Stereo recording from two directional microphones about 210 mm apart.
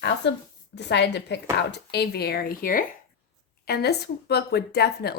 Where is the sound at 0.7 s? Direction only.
55° left (ahead or behind).